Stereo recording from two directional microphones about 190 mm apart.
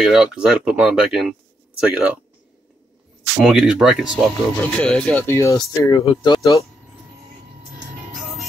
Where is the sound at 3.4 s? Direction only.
5° right (ahead or behind); by 6.6 s 15° left (ahead or behind).